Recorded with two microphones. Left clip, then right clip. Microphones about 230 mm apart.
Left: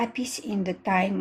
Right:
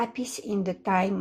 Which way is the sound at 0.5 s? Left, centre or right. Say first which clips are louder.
Even; centre.